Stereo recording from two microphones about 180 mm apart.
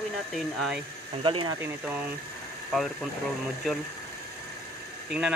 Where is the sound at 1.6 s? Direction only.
10° right (ahead or behind).